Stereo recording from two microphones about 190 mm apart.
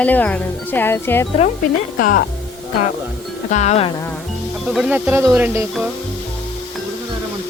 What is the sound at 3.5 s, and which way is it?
Music, 35° left (ahead or behind).